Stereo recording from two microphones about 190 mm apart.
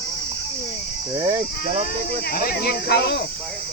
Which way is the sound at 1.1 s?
30° right (ahead or behind).